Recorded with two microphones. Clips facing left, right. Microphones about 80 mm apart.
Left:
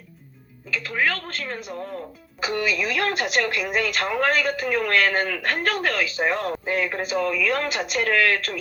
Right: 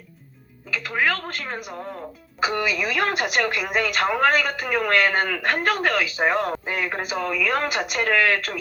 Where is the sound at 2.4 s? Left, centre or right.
Right.